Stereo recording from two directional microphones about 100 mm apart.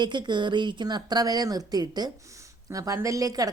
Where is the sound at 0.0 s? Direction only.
50° right (ahead or behind).